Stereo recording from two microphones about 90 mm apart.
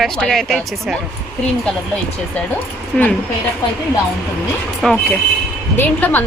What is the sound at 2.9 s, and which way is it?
Speech, 5° left (ahead or behind).